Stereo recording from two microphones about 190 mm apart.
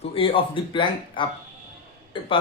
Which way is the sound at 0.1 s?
30° left (ahead or behind).